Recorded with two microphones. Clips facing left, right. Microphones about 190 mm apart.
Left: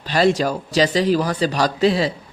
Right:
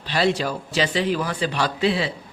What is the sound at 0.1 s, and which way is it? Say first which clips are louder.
A man's voice: left 4 dB; 45° left (ahead or behind).